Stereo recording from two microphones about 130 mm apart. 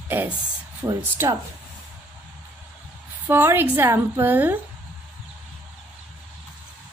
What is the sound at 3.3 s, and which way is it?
A woman's voice, 15° right (ahead or behind).